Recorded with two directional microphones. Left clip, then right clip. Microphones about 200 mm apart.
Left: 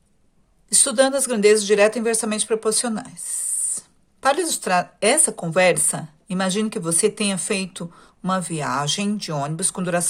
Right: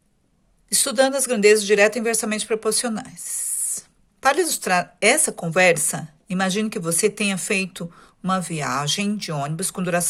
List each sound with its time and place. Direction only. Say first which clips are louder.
0.7 s speech: left 1 dB; 20° right (ahead or behind)